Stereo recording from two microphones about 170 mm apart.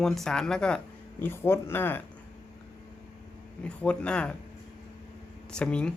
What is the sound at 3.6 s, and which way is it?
Speech, 5° left (ahead or behind).